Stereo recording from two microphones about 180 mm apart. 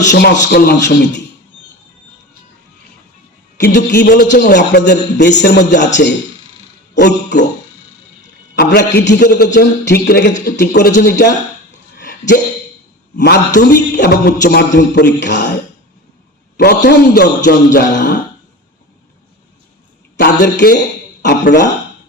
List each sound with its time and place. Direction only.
0.0 s a man's voice: 75° left (ahead or behind)
3.6 s a man's voice: 55° left (ahead or behind); by 7.3 s 75° left (ahead or behind)
9.0 s a man's voice: 65° left (ahead or behind)
11.9 s hiccup: 70° left (ahead or behind)
13.1 s a man's voice: 65° left (ahead or behind)
16.6 s a man's voice: 65° left (ahead or behind)
20.1 s a man's voice: 65° left (ahead or behind)